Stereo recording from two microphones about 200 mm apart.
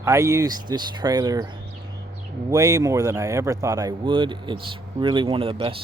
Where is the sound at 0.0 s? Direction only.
15° right (ahead or behind).